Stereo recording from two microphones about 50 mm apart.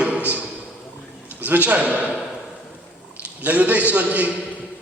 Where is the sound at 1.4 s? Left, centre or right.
Right.